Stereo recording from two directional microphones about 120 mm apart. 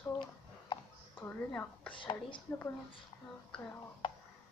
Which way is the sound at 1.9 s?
45° left (ahead or behind).